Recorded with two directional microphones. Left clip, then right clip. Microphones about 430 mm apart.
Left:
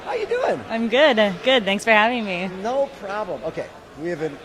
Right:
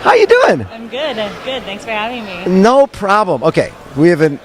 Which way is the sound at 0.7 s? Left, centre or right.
Left.